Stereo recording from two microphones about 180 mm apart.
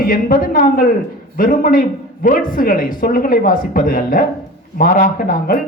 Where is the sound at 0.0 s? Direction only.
55° left (ahead or behind).